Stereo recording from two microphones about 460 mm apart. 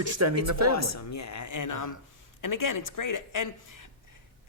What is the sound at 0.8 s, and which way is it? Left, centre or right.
A woman's voice, left.